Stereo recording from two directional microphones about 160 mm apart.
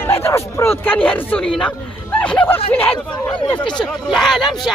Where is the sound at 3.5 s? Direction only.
30° left (ahead or behind).